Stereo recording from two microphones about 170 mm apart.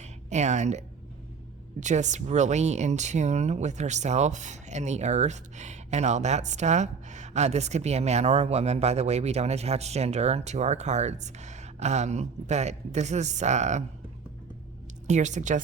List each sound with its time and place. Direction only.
0.0 s a sound: 40° right (ahead or behind)
1.8 s speech: 45° right (ahead or behind)
15.0 s speech: 45° right (ahead or behind)